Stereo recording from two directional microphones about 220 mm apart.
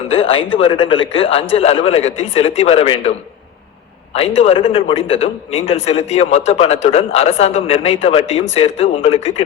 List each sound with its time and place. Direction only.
0.1 s a man's voice: 25° left (ahead or behind)